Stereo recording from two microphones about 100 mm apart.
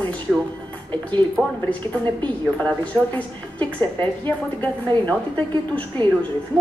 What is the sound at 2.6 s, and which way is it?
Speech, 15° left (ahead or behind).